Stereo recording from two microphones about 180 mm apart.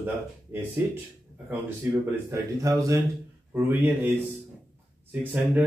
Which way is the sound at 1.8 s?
15° right (ahead or behind).